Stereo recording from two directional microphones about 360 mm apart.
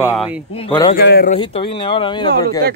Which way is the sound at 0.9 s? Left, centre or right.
Left.